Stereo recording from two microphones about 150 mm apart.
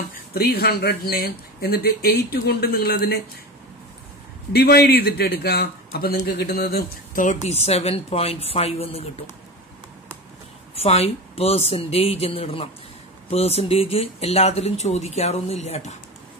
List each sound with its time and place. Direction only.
0.3 s speech: 90° left
4.5 s a man's voice: 90° left; by 9.1 s 40° left (ahead or behind)
10.7 s speech: 45° left (ahead or behind)